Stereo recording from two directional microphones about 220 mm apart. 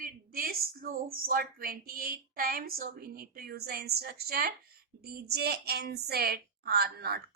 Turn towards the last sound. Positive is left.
turn(degrees=-45)  # may be behind; listen again after turning